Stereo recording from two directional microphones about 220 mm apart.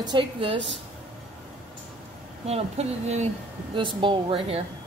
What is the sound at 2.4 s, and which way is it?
Speech, 30° right (ahead or behind).